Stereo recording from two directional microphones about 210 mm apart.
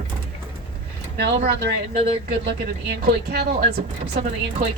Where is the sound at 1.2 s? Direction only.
50° right (ahead or behind).